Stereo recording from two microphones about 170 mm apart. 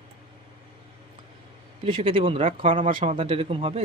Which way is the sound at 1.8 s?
30° right (ahead or behind).